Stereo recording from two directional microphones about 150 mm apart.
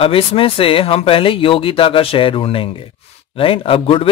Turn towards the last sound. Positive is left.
turn(degrees=35)  # may be behind; listen again after turning